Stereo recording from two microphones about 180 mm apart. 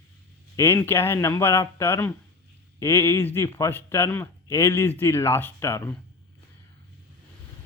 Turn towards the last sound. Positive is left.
turn(degrees=15)  # may be behind; listen again after turning